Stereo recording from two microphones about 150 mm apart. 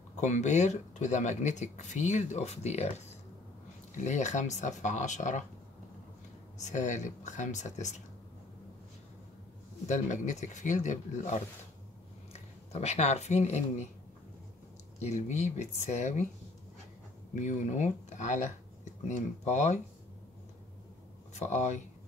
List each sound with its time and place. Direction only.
0.2 s speech: 50° left (ahead or behind)
6.6 s speech: 55° left (ahead or behind)
9.8 s speech: 55° left (ahead or behind)
15.0 s speech: 50° left (ahead or behind)
17.4 s speech: 55° left (ahead or behind)
21.3 s speech: 50° left (ahead or behind)